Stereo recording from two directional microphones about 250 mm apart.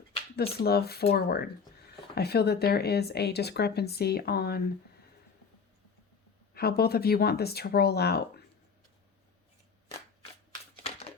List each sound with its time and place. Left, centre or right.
0.6 s speech: left
6.5 s speech: left
10.8 s a sound: left